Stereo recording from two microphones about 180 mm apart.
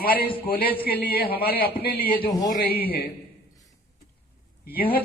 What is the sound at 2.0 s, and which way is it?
Music, 55° left (ahead or behind).